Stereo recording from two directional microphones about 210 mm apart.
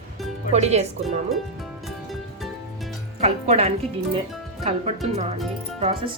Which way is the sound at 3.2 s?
30° right (ahead or behind).